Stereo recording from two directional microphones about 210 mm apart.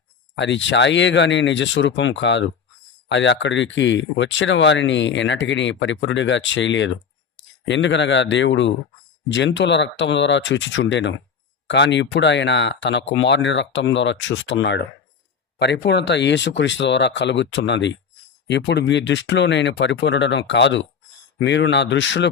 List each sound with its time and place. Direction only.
0.3 s speech: 60° left (ahead or behind)